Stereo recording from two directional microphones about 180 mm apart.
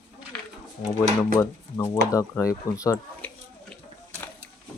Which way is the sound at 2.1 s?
15° left (ahead or behind).